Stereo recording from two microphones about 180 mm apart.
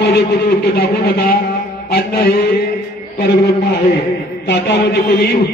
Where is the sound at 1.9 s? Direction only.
60° left (ahead or behind).